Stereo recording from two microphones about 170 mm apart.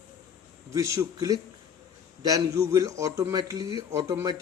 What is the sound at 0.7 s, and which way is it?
Speech, 20° right (ahead or behind).